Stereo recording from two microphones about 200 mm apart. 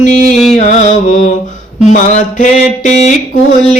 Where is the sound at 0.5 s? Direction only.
35° left (ahead or behind).